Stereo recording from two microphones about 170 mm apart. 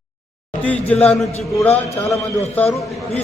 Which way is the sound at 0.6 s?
10° left (ahead or behind).